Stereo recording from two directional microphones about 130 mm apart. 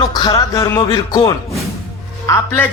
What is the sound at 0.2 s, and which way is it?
Speech, 35° left (ahead or behind).